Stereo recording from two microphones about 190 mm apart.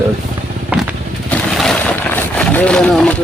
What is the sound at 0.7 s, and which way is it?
Vehicle, 5° right (ahead or behind).